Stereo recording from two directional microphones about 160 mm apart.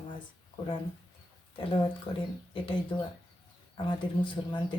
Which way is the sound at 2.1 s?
35° left (ahead or behind).